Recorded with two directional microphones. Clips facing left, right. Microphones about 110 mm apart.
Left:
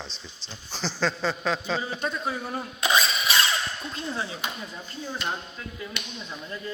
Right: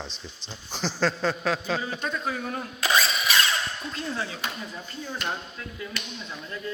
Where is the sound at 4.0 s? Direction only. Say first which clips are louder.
Even; 20° left (ahead or behind).